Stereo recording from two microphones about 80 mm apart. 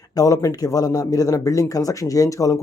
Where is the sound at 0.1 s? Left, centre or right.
Left.